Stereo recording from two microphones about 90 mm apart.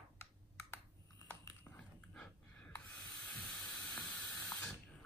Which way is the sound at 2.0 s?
10° left (ahead or behind).